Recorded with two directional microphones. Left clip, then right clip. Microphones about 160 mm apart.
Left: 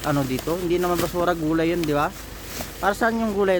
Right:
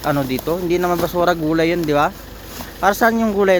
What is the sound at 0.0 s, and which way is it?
Speech, 10° right (ahead or behind).